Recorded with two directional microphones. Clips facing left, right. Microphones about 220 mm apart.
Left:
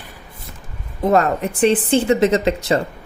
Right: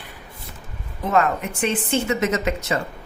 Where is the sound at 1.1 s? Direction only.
35° left (ahead or behind).